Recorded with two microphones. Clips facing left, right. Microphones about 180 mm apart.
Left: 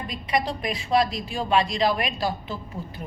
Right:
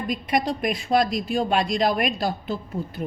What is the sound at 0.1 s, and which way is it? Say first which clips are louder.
A woman's voice: right 2 dB; 50° right (ahead or behind).